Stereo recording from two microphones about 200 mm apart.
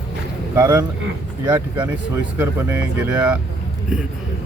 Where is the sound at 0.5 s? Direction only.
15° right (ahead or behind).